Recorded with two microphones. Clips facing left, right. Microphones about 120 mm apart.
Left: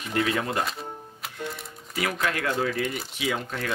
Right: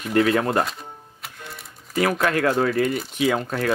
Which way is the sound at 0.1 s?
45° right (ahead or behind).